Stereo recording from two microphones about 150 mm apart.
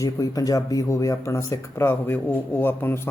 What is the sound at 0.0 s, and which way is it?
A man's voice, 25° left (ahead or behind).